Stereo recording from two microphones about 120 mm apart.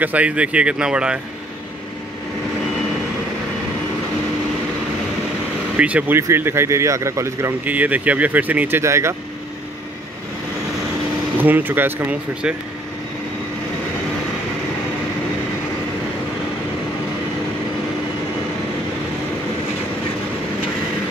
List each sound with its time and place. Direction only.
0.0 s speech: 10° right (ahead or behind)
5.8 s speech: 10° right (ahead or behind)
7.7 s speech: 15° right (ahead or behind)
11.3 s speech: 15° right (ahead or behind)